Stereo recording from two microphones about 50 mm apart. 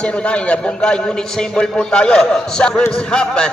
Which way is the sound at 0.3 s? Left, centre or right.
Left.